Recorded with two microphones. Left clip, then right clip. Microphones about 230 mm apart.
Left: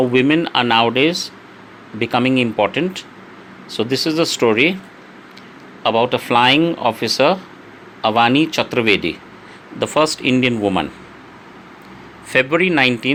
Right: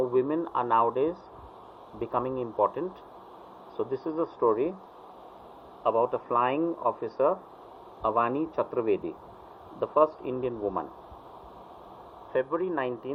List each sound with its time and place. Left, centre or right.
0.1 s speech: left
3.8 s speech: left
5.8 s speech: left
12.3 s speech: left